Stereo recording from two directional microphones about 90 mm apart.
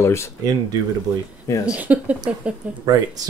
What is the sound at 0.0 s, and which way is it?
Speech, 30° left (ahead or behind).